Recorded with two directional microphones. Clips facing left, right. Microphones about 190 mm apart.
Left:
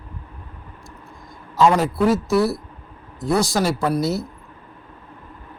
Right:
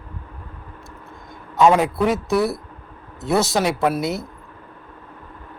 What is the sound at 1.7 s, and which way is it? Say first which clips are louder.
Speech: even; centre (ahead or behind).